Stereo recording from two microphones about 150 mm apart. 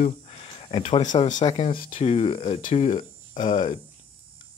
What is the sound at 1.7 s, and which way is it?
Speech, 65° left (ahead or behind).